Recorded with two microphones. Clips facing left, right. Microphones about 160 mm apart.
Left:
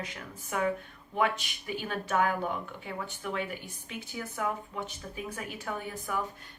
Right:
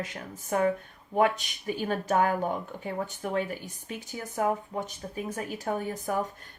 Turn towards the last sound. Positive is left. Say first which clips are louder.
# right 5 dB
turn(degrees=-40)  # may be behind; listen again after turning